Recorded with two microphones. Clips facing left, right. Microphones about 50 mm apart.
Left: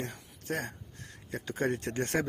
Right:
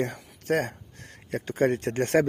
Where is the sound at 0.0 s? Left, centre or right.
Right.